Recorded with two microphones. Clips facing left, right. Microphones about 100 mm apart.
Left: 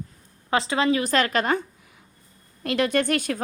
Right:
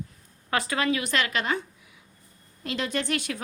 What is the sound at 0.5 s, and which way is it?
A woman's voice, 25° left (ahead or behind).